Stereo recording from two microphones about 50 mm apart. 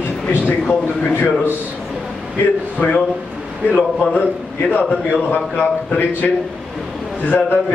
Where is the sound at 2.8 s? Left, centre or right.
Left.